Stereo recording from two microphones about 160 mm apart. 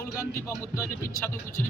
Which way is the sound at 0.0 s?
15° left (ahead or behind).